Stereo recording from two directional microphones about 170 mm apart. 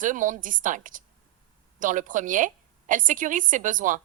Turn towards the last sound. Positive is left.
turn(degrees=-50)  # may be behind; listen again after turning